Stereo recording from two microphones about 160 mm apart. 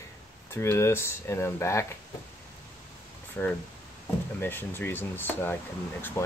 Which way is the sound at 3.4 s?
10° left (ahead or behind).